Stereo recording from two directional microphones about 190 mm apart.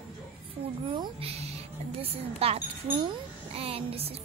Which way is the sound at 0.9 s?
25° right (ahead or behind).